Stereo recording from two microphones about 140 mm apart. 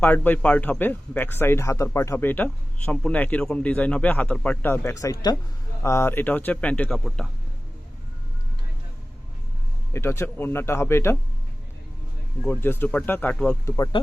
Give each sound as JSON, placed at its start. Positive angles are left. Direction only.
{"t": 0.0, "sound": "speech", "side_deg": 15}
{"t": 9.9, "sound": "speech", "side_deg": 20}
{"t": 12.5, "sound": "speech", "side_deg": 15}
{"t": 13.7, "sound": "speech", "side_deg": 25}